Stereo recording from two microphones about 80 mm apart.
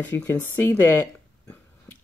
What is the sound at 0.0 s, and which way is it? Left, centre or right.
Speech, left.